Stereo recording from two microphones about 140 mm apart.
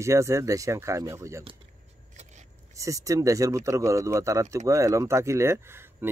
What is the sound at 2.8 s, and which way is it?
Speech, 25° right (ahead or behind).